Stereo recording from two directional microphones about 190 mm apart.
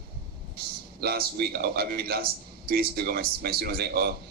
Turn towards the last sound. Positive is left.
turn(degrees=-55)  # may be behind; listen again after turning